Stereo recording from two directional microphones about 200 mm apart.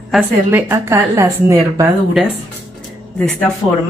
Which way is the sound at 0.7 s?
15° right (ahead or behind).